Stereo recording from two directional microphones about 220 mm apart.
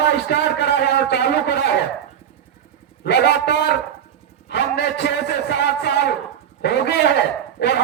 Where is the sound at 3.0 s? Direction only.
50° left (ahead or behind).